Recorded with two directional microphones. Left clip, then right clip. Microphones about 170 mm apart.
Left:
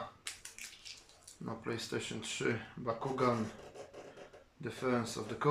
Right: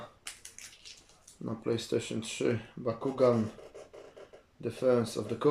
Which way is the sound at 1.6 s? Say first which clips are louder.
Right 8 dB; 20° right (ahead or behind).